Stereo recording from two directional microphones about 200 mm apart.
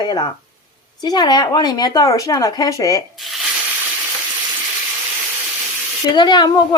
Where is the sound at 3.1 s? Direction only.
Centre (ahead or behind).